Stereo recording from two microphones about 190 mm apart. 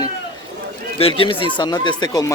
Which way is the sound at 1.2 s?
25° left (ahead or behind).